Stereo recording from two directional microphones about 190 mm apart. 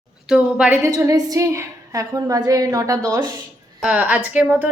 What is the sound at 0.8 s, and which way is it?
Speech, 15° right (ahead or behind).